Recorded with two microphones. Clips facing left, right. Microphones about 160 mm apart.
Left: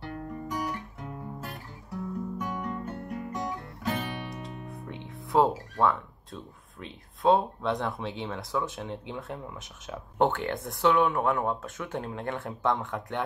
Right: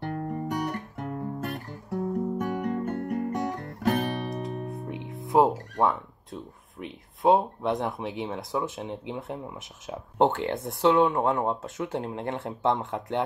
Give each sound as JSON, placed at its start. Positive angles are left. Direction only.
{"t": 0.0, "sound": "guitar", "side_deg": -50}
{"t": 0.5, "sound": "music", "side_deg": -60}
{"t": 5.1, "sound": "music", "side_deg": -20}
{"t": 5.8, "sound": "speech", "side_deg": -20}